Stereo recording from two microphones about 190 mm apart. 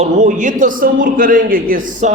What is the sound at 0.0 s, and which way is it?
A man's voice, 40° right (ahead or behind).